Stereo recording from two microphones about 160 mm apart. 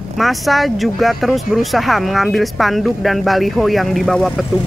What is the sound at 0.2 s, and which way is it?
Speech, centre (ahead or behind).